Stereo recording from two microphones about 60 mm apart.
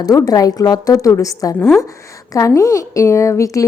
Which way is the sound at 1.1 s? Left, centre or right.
Left.